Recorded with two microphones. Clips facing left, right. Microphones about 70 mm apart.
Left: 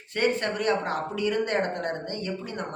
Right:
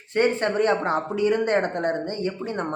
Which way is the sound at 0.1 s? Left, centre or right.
Right.